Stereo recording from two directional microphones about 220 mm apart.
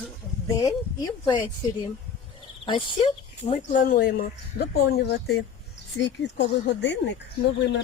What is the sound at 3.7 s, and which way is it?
Speech, 40° left (ahead or behind).